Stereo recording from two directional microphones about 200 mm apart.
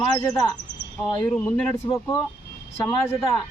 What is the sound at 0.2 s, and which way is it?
Speech, 20° left (ahead or behind).